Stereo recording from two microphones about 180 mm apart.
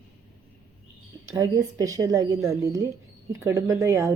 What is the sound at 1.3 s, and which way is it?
A woman's voice, 20° right (ahead or behind).